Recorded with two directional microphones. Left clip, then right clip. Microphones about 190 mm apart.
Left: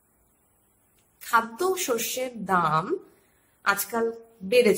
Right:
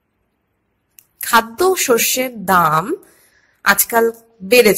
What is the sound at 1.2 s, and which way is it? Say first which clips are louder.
A woman's voice: right 9 dB; 40° right (ahead or behind).